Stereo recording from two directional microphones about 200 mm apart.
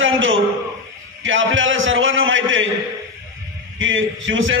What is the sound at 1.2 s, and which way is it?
A man's voice, 70° right (ahead or behind).